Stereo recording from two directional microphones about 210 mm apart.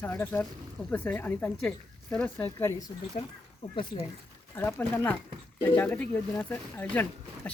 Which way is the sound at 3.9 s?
25° left (ahead or behind).